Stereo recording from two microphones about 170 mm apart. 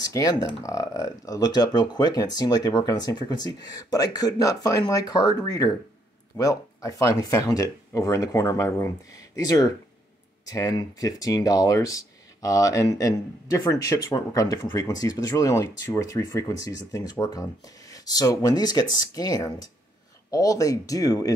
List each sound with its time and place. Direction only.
0.0 s speech: 20° left (ahead or behind)